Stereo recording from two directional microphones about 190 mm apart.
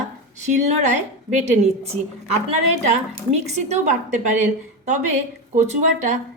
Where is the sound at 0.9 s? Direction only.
40° right (ahead or behind).